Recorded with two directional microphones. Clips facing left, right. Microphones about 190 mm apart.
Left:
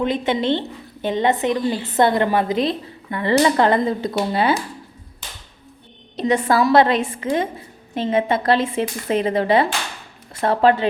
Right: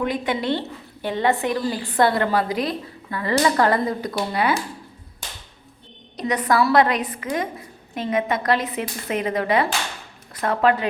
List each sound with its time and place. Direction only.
0.0 s speech: 25° left (ahead or behind)
6.1 s speech: 25° left (ahead or behind)